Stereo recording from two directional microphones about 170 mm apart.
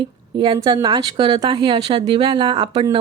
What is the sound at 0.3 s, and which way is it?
A woman's voice, 25° right (ahead or behind).